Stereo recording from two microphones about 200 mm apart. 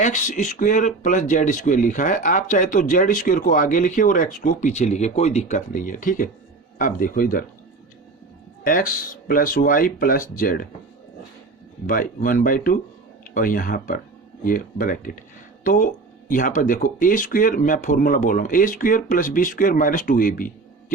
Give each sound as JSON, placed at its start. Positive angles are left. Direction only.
{"t": 0.0, "sound": "speech", "side_deg": 35}
{"t": 8.6, "sound": "speech", "side_deg": 45}
{"t": 11.9, "sound": "speech", "side_deg": 45}